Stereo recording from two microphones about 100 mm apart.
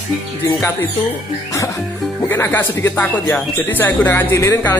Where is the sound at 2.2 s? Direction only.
20° left (ahead or behind).